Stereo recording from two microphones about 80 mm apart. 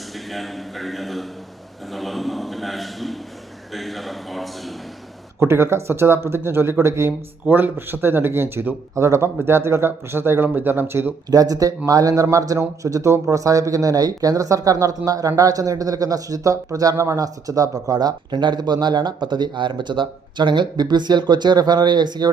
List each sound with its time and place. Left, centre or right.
0.3 s a man's voice: centre
5.4 s speech: right
11.3 s speech: right